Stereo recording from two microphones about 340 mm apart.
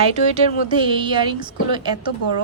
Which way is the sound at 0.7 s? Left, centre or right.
Centre.